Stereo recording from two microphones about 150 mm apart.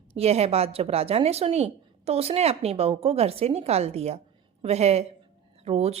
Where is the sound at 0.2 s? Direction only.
45° right (ahead or behind).